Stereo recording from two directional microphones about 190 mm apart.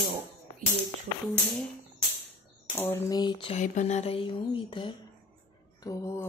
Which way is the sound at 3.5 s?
40° left (ahead or behind).